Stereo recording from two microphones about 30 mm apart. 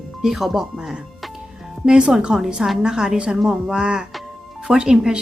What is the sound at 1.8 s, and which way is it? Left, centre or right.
A woman's voice, right.